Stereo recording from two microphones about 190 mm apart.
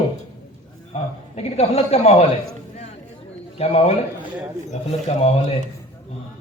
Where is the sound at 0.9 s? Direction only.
35° left (ahead or behind).